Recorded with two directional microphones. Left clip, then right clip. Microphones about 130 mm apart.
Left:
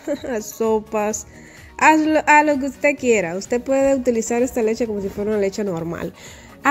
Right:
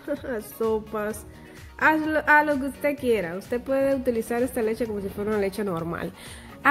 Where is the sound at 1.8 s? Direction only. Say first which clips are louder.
Left 7 dB; 55° left (ahead or behind).